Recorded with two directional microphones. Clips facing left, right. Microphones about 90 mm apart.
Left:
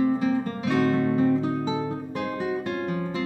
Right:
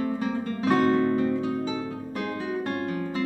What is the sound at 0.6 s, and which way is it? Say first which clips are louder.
Music: right 2 dB; 40° right (ahead or behind).